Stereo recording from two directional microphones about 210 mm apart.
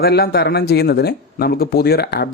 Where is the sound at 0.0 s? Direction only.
50° left (ahead or behind).